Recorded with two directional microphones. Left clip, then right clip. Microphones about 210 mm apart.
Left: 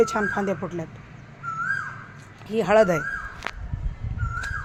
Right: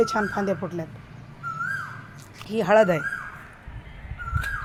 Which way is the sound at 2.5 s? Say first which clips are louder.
Even; centre (ahead or behind).